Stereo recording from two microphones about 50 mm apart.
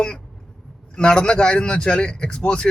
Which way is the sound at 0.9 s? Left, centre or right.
Centre.